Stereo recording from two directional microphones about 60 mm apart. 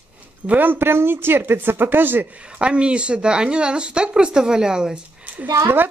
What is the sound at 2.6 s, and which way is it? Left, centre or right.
Speech, centre.